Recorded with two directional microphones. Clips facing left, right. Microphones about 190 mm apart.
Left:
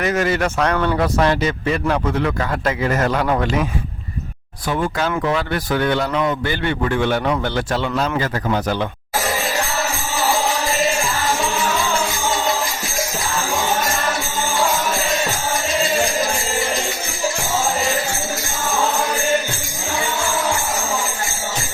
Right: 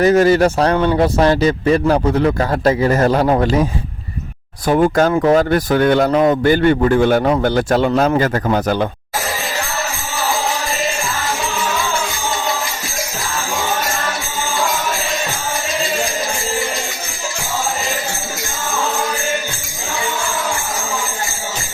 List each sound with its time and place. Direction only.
0.0 s speech: 35° right (ahead or behind)